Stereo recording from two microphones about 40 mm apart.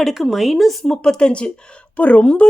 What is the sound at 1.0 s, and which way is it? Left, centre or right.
Speech, left.